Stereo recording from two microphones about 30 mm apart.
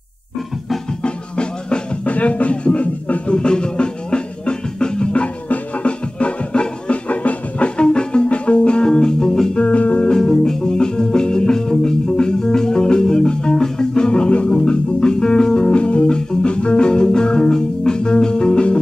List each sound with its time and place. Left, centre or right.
1.0 s music: left
2.0 s speech: left
3.3 s music: left
8.8 s music: left
9.5 s music: left
10.0 s music: centre
15.7 s music: left
16.1 s organ: left
16.4 s music: left